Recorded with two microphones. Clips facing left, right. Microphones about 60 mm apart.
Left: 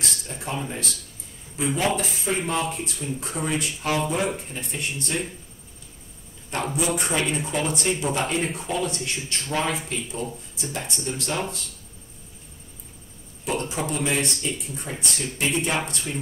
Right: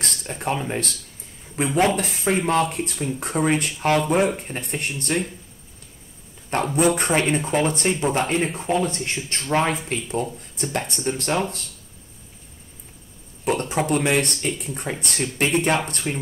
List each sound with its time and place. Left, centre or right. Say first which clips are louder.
0.0 s a sound: right 5 dB; right
1.6 s speech: right 4 dB; right
6.5 s speech: right 6 dB; right
13.5 s speech: right 5 dB; right